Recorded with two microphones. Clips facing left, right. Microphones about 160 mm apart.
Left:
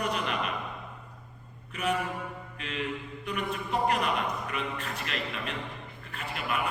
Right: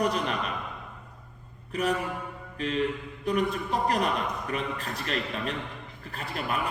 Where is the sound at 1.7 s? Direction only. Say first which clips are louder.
Right 2 dB; 35° right (ahead or behind).